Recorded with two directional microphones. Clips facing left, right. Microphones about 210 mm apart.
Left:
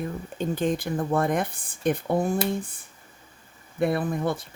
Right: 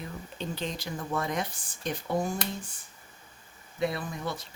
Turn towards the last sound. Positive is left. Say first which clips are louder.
# left 9 dB
turn(degrees=55)  # may be behind; listen again after turning